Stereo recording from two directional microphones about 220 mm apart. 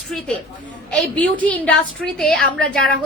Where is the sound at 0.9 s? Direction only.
5° left (ahead or behind).